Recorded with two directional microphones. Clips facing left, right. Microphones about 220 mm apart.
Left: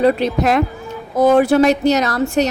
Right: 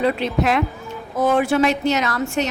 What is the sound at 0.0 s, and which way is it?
A woman's voice, 40° left (ahead or behind).